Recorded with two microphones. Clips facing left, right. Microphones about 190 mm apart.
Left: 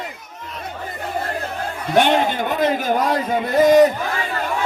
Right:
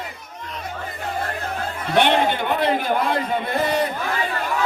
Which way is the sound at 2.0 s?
45° left (ahead or behind).